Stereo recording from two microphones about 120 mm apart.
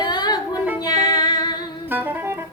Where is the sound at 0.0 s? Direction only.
35° left (ahead or behind).